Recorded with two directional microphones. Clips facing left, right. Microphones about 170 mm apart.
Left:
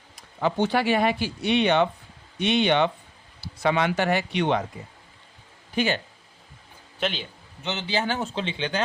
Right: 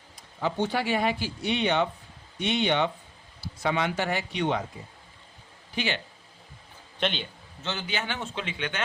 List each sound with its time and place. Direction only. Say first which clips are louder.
0.4 s speech: left 4 dB; 70° left (ahead or behind)
5.7 s speech: left 6 dB; 45° left (ahead or behind)
7.0 s a man's voice: left 1 dB; 5° left (ahead or behind)
7.6 s a man's voice: left 3 dB; 20° left (ahead or behind)
7.9 s speech: left 6 dB; 35° left (ahead or behind)